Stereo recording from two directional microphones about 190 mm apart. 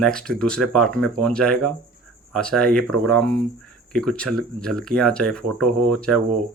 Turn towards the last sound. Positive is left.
turn(degrees=5)  # may be behind; listen again after turning